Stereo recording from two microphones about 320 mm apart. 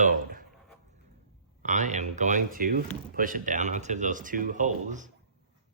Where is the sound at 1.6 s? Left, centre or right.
Right.